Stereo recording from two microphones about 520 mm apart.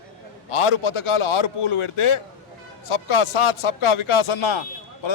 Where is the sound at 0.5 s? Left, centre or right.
Left.